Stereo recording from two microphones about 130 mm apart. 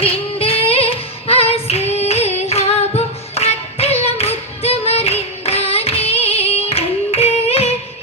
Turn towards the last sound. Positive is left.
turn(degrees=50)  # may be behind; listen again after turning